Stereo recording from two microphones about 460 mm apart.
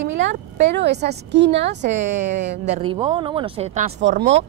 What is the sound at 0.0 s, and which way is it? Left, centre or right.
A woman's voice, right.